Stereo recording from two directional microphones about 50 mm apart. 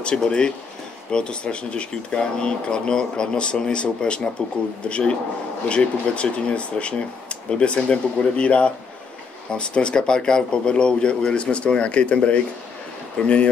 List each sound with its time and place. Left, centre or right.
0.0 s speech: centre